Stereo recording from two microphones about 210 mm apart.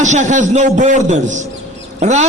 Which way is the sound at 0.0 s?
35° right (ahead or behind).